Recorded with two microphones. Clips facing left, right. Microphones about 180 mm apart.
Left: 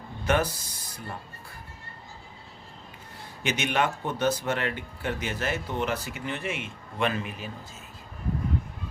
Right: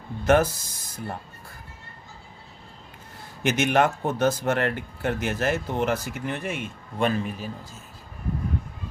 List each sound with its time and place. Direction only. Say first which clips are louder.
0.3 s speech: right 6 dB; 45° right (ahead or behind)
3.4 s speech: right 6 dB; 50° right (ahead or behind)